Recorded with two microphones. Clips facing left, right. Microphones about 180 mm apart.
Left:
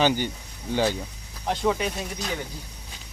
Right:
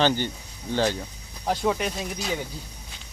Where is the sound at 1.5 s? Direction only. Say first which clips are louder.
Even; centre (ahead or behind).